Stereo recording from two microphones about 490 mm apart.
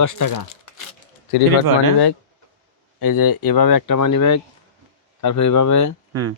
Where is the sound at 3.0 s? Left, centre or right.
Left.